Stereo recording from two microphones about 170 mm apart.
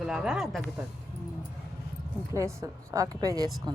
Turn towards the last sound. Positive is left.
turn(degrees=-20)  # may be behind; listen again after turning